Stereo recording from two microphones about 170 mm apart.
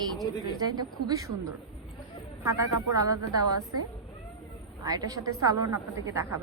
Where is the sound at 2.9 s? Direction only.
20° right (ahead or behind).